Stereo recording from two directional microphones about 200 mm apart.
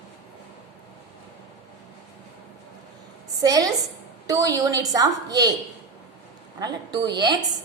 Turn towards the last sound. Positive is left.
turn(degrees=-20)  # may be behind; listen again after turning